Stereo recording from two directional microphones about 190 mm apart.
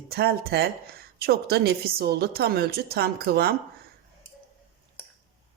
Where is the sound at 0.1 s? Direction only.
55° right (ahead or behind).